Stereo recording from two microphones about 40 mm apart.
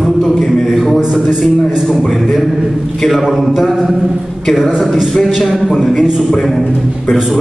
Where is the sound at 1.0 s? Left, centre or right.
Centre.